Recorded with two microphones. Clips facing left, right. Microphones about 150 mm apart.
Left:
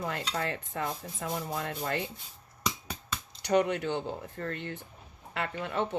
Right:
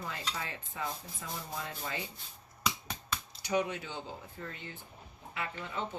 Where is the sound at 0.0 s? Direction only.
65° left (ahead or behind).